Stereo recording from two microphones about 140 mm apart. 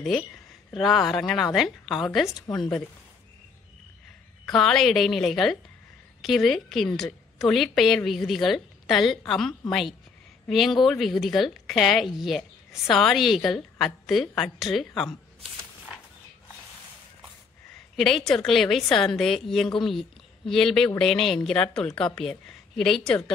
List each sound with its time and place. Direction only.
0.7 s speech: centre (ahead or behind)
2.5 s a woman's voice: 30° left (ahead or behind)
4.5 s speech: 5° left (ahead or behind)
17.9 s speech: centre (ahead or behind)